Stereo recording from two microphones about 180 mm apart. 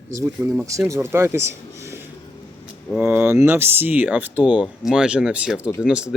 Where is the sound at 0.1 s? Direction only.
15° right (ahead or behind).